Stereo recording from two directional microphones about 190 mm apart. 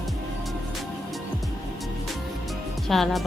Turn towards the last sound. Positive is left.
turn(degrees=0)  # may be behind; listen again after turning